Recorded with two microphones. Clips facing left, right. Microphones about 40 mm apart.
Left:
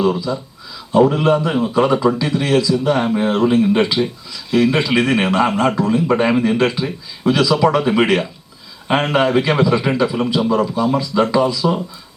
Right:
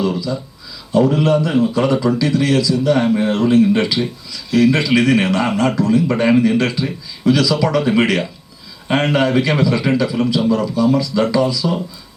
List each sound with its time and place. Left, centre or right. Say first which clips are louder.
0.0 s a man's voice: left 2 dB; left